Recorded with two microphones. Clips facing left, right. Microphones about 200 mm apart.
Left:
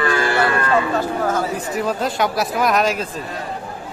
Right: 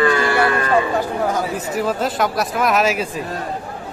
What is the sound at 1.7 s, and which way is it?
Speech, centre (ahead or behind).